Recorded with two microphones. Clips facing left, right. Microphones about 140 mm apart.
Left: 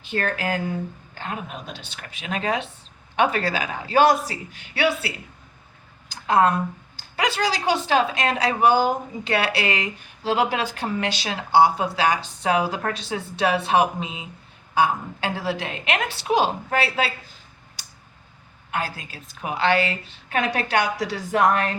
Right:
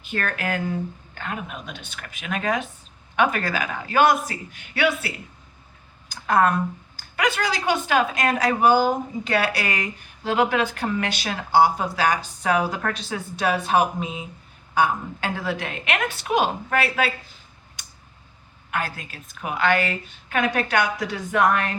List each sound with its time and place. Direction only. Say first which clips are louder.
0.0 s a woman's voice: left 2 dB; 30° left (ahead or behind)
6.1 s a sound: left 1 dB; 25° left (ahead or behind)
6.9 s a woman's voice: right 1 dB; 30° left (ahead or behind)
18.7 s a woman's voice: even; 30° left (ahead or behind)